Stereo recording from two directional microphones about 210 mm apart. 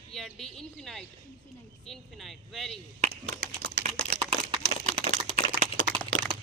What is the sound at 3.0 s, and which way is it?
Speech, 30° right (ahead or behind).